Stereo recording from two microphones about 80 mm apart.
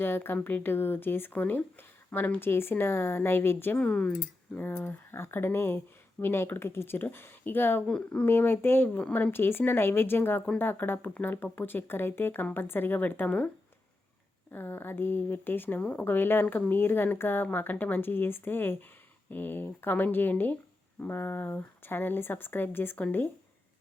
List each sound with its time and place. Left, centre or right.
0.0 s speech: left
3.8 s speech: centre
7.9 s speech: centre
8.2 s speech: left
14.5 s speech: left